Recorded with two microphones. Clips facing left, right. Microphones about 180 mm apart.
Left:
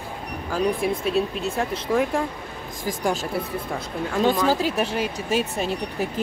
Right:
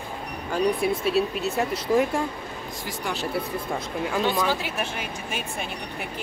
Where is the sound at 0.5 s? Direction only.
Centre (ahead or behind).